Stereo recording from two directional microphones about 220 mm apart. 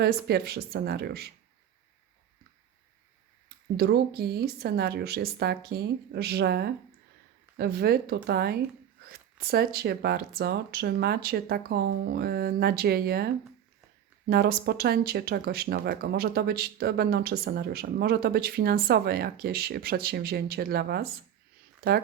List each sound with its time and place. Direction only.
0.0 s speech: 45° right (ahead or behind)
3.8 s speech: 45° right (ahead or behind)
14.3 s speech: 45° right (ahead or behind)